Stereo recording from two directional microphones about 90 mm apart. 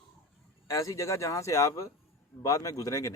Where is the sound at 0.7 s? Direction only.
35° left (ahead or behind).